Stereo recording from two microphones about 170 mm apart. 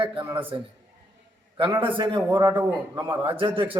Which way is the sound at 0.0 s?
30° right (ahead or behind).